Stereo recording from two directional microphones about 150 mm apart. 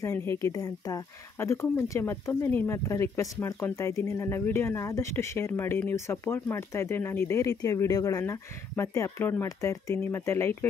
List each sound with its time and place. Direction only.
0.0 s speech: 15° left (ahead or behind)